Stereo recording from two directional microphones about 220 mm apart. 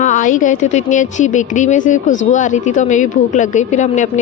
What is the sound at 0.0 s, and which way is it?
Speech, 35° left (ahead or behind).